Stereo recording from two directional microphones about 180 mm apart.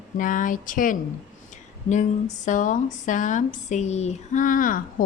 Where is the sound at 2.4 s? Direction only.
45° left (ahead or behind).